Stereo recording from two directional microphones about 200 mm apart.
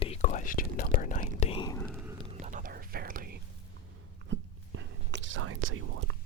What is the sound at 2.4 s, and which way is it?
Whispering, 40° right (ahead or behind).